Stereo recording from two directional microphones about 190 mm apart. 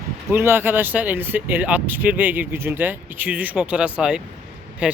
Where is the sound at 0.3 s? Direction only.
15° right (ahead or behind).